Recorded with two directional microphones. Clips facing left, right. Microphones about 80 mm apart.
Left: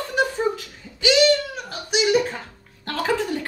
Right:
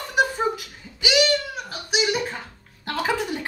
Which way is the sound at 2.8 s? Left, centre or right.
Centre.